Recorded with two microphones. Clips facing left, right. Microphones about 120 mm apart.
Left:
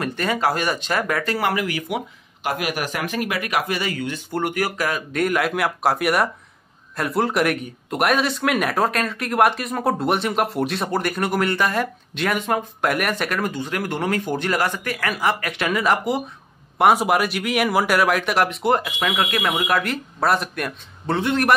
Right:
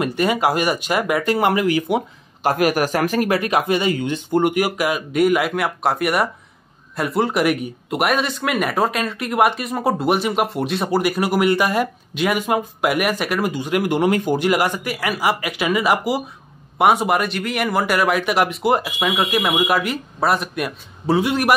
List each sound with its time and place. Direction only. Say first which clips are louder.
0.0 s speech: right 3 dB; 15° right (ahead or behind)
2.6 s speech: right 8 dB; 40° right (ahead or behind)
3.3 s a man's voice: right 5 dB; 25° right (ahead or behind); by 21.5 s 10° right (ahead or behind)